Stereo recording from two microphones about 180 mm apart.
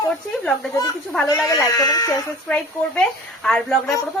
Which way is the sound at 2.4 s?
5° left (ahead or behind).